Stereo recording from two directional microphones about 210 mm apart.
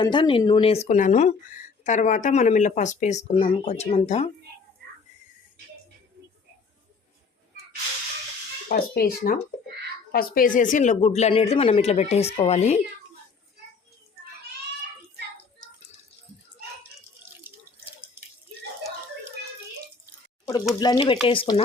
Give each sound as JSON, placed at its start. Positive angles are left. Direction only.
{"t": 0.0, "sound": "speech", "side_deg": 20}
{"t": 8.7, "sound": "speech", "side_deg": 45}
{"t": 20.7, "sound": "speech", "side_deg": 20}